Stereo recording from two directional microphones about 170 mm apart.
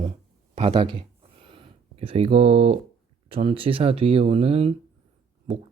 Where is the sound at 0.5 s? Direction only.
30° right (ahead or behind).